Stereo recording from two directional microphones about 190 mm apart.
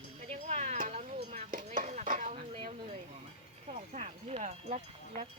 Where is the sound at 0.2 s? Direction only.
40° right (ahead or behind).